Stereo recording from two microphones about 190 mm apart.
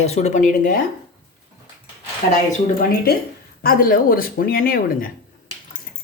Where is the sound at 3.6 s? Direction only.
50° left (ahead or behind).